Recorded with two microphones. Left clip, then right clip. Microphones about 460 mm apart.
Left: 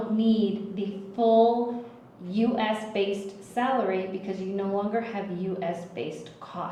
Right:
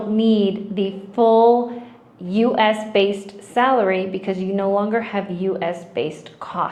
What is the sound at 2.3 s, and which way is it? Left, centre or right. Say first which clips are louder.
A woman's voice: right 10 dB; right.